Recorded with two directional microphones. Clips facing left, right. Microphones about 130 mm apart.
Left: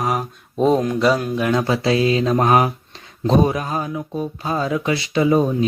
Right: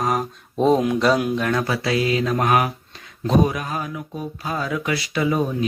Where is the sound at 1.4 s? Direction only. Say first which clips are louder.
Left 4 dB; 20° left (ahead or behind).